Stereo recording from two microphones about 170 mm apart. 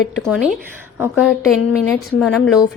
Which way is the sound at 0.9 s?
10° right (ahead or behind).